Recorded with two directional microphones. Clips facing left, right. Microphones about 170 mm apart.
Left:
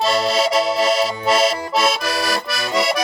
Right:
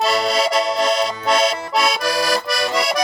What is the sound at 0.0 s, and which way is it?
Accordion, centre (ahead or behind).